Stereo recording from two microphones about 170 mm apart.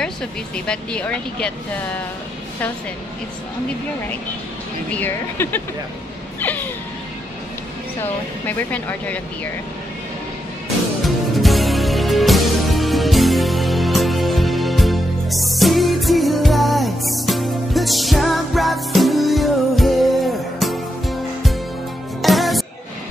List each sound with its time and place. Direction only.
0.0 s speech: 5° left (ahead or behind)
4.9 s speech: 10° left (ahead or behind)
6.4 s a sound: 10° left (ahead or behind)
8.0 s speech: 10° left (ahead or behind)
11.1 s music: centre (ahead or behind)